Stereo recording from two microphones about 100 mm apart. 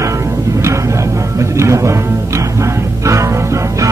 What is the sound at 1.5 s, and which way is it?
Speech, 30° right (ahead or behind).